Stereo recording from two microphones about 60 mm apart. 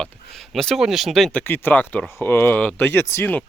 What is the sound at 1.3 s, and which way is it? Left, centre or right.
Speech, left.